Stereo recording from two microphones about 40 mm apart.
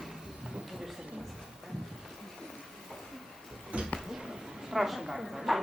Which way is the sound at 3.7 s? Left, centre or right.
Right.